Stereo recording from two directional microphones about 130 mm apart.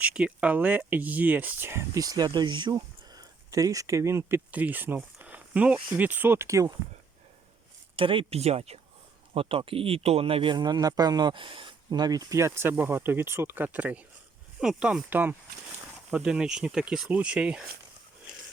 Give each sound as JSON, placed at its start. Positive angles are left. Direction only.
{"t": 0.0, "sound": "speech", "side_deg": -10}
{"t": 7.9, "sound": "speech", "side_deg": -40}